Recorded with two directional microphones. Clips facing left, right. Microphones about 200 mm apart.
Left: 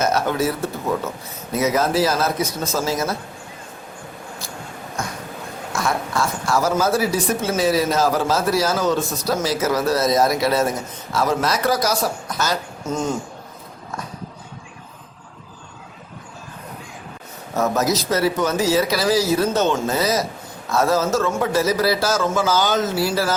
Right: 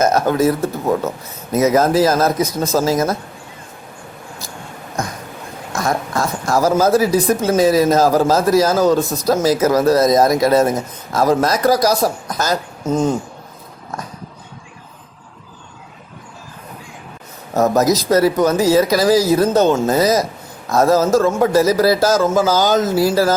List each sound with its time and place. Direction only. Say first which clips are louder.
0.0 s a man's voice: right 5 dB; 45° right (ahead or behind)
5.7 s a sound: right 3 dB; 40° right (ahead or behind)
7.4 s a man's voice: right 6 dB; 45° right (ahead or behind)
17.5 s a man's voice: right 6 dB; 40° right (ahead or behind)